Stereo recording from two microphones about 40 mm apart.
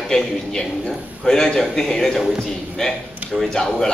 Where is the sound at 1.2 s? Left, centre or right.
Centre.